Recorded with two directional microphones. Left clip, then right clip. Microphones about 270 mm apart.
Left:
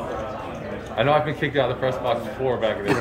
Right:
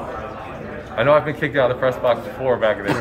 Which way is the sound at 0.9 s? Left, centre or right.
Centre.